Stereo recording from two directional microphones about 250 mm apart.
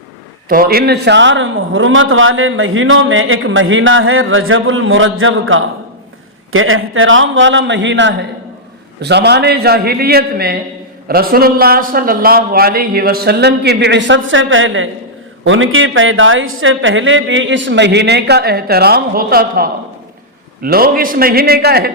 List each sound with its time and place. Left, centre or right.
0.4 s a man's voice: right